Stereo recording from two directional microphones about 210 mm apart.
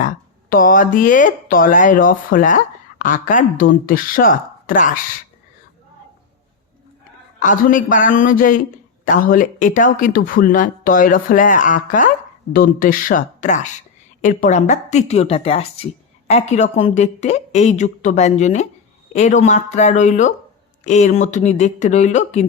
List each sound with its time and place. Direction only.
0.5 s speech: 40° left (ahead or behind)
7.3 s speech: 40° left (ahead or behind)